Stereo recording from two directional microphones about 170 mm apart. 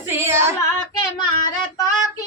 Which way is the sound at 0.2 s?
15° right (ahead or behind).